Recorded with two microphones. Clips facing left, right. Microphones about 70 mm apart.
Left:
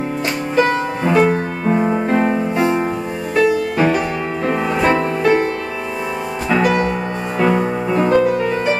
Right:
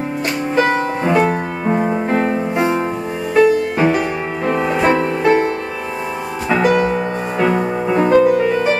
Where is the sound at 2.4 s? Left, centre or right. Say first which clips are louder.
Even; centre.